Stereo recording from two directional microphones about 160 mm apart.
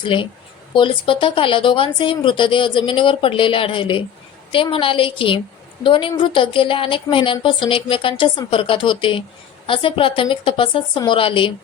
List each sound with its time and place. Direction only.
0.0 s a woman's voice: 30° left (ahead or behind)